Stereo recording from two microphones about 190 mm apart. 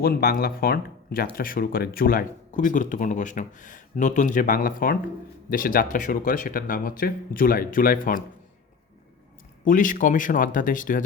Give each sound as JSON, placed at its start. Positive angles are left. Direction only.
{"t": 0.0, "sound": "speech", "side_deg": 55}
{"t": 9.6, "sound": "speech", "side_deg": 45}